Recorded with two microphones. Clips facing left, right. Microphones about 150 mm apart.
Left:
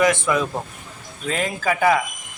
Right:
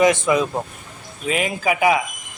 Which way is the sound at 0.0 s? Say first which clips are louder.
Right 3 dB; 20° right (ahead or behind).